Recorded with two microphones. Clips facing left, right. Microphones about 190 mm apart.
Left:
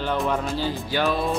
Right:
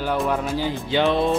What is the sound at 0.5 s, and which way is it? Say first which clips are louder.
Speech: right 3 dB; 15° right (ahead or behind).